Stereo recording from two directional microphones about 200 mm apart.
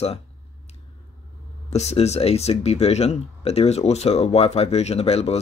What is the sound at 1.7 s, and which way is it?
Speech, 35° left (ahead or behind).